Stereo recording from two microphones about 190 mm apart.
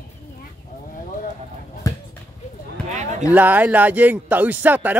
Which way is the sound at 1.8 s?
15° left (ahead or behind).